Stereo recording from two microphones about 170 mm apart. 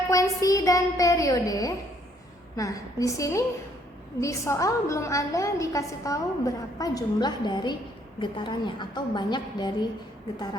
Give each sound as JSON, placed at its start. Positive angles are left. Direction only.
{"t": 0.1, "sound": "a woman's voice", "side_deg": 20}